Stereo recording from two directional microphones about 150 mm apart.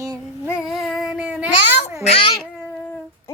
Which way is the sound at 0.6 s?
Centre (ahead or behind).